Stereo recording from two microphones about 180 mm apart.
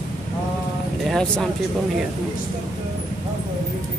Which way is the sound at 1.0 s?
5° left (ahead or behind).